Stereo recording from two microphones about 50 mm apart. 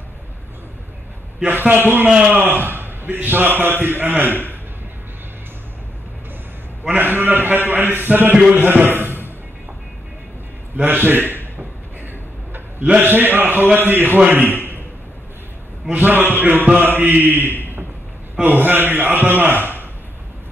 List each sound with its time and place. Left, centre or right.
1.5 s a man's voice: right
7.0 s a man's voice: right
8.9 s music: right
10.8 s a man's voice: right
13.0 s a man's voice: right
15.9 s a man's voice: right
16.8 s mantra: right
18.4 s a man's voice: right